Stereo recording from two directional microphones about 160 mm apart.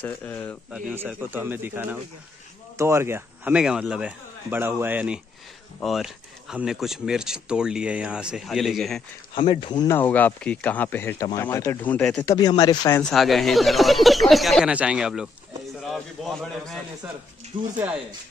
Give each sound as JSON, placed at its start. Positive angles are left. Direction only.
{"t": 0.0, "sound": "speech", "side_deg": 10}
{"t": 0.9, "sound": "speech", "side_deg": -15}
{"t": 9.3, "sound": "speech", "side_deg": 30}
{"t": 9.9, "sound": "speech", "side_deg": 10}
{"t": 12.3, "sound": "speech", "side_deg": 25}
{"t": 13.0, "sound": "speech", "side_deg": 0}
{"t": 17.5, "sound": "speech", "side_deg": -50}